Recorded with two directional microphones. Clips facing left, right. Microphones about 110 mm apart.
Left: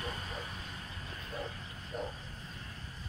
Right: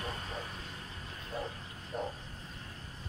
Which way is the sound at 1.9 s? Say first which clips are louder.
Right 2 dB; 40° right (ahead or behind).